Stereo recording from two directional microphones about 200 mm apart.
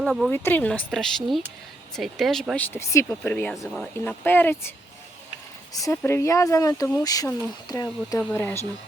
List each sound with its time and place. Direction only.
0.0 s speech: centre (ahead or behind)
0.3 s speech: 10° left (ahead or behind)
5.7 s speech: 15° left (ahead or behind)